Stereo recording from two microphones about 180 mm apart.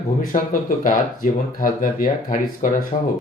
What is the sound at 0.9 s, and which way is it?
Speech, 50° left (ahead or behind).